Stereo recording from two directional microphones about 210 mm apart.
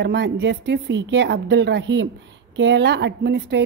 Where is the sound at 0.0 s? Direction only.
55° right (ahead or behind).